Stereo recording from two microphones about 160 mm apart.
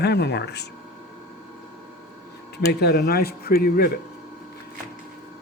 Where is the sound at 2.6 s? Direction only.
90° left; by 3.9 s 70° left (ahead or behind).